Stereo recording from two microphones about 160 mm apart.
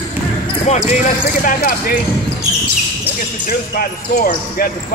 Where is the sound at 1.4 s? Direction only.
65° left (ahead or behind).